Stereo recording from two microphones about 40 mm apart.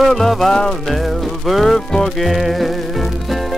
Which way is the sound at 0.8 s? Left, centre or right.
Centre.